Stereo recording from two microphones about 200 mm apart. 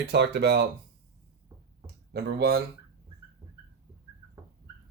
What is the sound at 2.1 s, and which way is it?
Speech, 55° right (ahead or behind).